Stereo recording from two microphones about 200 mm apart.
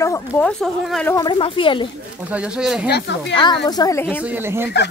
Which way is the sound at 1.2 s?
25° left (ahead or behind).